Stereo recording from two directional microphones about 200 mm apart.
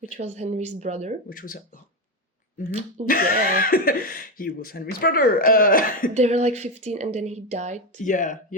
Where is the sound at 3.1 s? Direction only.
45° left (ahead or behind).